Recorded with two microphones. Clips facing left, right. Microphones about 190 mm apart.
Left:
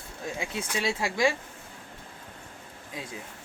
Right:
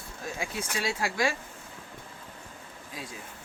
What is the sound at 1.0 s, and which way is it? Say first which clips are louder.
Speech: left 3 dB; 20° left (ahead or behind).